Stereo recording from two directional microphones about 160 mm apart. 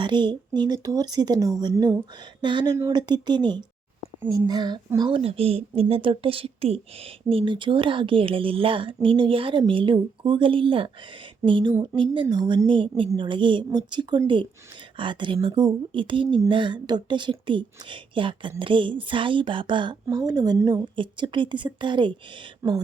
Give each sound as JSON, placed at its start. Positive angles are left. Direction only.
{"t": 0.0, "sound": "speech", "side_deg": -30}
{"t": 22.6, "sound": "speech", "side_deg": -20}